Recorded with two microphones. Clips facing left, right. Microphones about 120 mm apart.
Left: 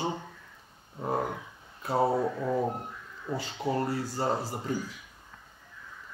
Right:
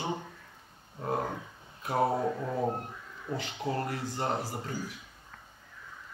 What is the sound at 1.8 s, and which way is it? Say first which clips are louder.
Speech: left 2 dB; 25° left (ahead or behind).